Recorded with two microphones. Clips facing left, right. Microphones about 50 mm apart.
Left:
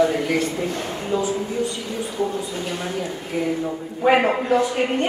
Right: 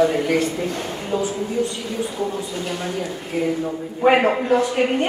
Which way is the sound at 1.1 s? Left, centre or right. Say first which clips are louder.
Even; right.